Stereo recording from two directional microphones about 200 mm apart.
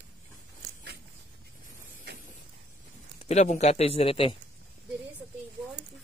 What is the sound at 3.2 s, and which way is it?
A man's voice, 35° left (ahead or behind).